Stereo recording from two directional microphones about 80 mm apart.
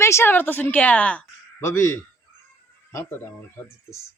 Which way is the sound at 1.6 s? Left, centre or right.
Left.